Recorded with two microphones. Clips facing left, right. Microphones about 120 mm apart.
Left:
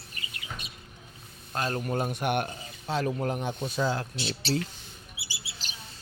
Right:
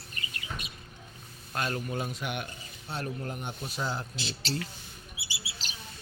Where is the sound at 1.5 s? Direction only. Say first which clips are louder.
Left 2 dB; 35° left (ahead or behind).